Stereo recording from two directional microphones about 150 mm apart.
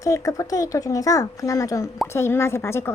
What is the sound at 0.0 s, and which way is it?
A woman's voice, 20° left (ahead or behind).